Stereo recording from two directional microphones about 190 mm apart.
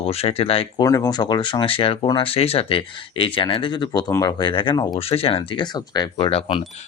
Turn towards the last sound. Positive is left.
turn(degrees=30)  # may be behind; listen again after turning